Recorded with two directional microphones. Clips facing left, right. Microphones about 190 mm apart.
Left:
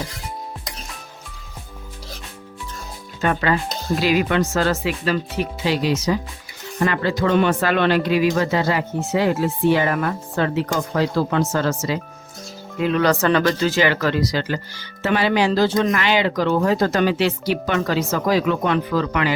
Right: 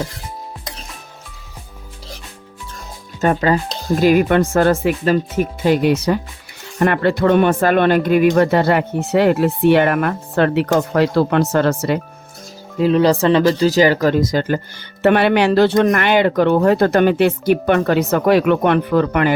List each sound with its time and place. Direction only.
3.2 s speech: 40° right (ahead or behind); by 11.9 s 60° right (ahead or behind)
12.8 s speech: 30° right (ahead or behind); by 19.3 s 55° right (ahead or behind)